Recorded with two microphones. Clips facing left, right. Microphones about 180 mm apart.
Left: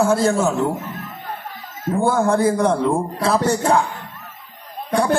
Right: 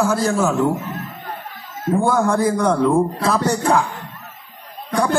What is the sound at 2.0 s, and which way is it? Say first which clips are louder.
A man's voice: left 2 dB; 30° left (ahead or behind).